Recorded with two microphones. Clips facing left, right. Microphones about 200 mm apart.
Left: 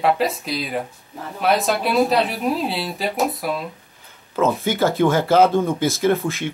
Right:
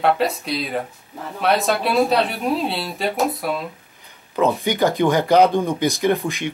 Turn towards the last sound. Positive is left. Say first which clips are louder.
# even
turn(degrees=-15)  # may be behind; listen again after turning